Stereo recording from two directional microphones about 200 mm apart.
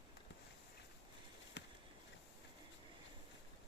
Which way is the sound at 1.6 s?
60° left (ahead or behind).